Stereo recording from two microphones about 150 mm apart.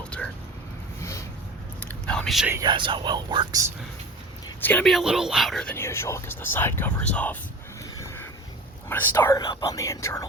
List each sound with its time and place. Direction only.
0.1 s a sound: 5° left (ahead or behind)
1.8 s whispering: 10° left (ahead or behind)
2.6 s speech: 35° right (ahead or behind)
4.6 s speech: 5° left (ahead or behind)
8.9 s speech: 15° left (ahead or behind)